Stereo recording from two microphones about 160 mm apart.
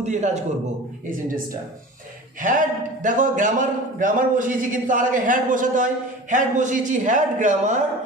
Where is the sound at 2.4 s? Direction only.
55° right (ahead or behind).